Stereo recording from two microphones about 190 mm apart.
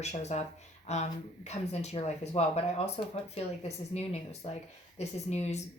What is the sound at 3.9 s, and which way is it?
Speech, 35° left (ahead or behind).